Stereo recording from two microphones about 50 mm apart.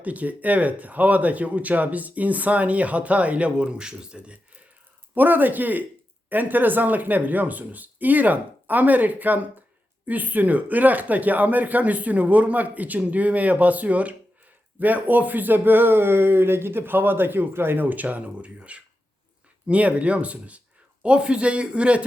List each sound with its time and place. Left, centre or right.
0.0 s speech: right
5.1 s speech: right
17.8 s speech: right